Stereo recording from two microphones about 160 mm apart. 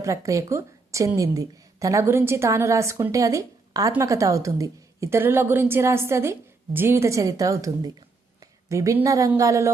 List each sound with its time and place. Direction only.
0.0 s a woman's voice: 20° right (ahead or behind)